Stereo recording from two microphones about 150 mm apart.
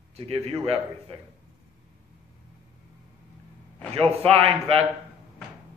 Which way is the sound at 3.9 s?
40° right (ahead or behind).